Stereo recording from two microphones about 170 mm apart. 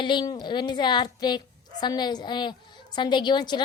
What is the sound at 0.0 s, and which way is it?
A woman's voice, 25° left (ahead or behind).